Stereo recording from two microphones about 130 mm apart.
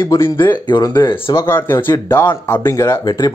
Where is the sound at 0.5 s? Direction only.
35° left (ahead or behind).